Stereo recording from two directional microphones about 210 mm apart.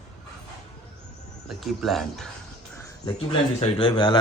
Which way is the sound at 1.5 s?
Centre (ahead or behind).